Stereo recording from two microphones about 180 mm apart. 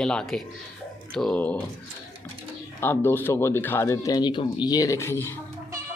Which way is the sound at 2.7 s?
10° left (ahead or behind).